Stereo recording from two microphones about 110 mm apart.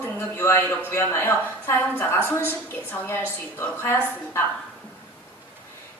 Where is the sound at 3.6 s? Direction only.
20° left (ahead or behind).